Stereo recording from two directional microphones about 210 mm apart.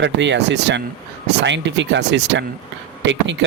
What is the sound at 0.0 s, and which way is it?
Speech, 55° right (ahead or behind).